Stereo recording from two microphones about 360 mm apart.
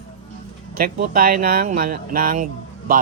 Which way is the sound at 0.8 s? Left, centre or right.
Right.